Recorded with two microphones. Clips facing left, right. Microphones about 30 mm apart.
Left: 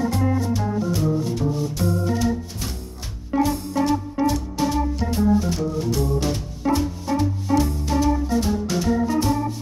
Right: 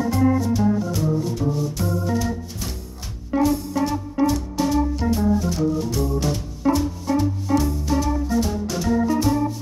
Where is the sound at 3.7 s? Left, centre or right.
Centre.